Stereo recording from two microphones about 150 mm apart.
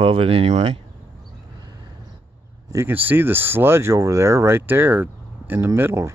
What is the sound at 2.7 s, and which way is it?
Speech, 15° right (ahead or behind).